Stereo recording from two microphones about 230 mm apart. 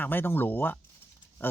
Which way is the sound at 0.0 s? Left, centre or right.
Centre.